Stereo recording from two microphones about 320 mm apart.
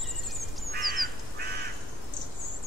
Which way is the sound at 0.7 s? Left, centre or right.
Right.